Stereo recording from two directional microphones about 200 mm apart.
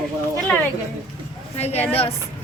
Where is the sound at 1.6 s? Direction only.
30° left (ahead or behind).